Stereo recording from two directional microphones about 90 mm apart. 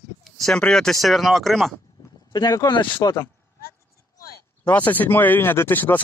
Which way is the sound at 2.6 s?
65° left (ahead or behind).